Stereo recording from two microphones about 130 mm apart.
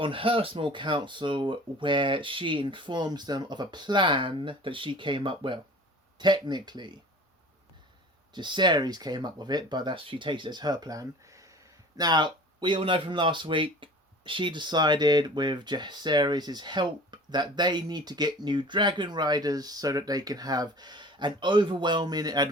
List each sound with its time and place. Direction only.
0.0 s speech: 45° right (ahead or behind)
8.3 s speech: 35° right (ahead or behind)